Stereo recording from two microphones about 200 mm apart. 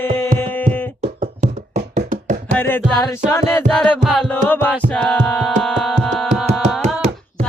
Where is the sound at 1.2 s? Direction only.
35° right (ahead or behind).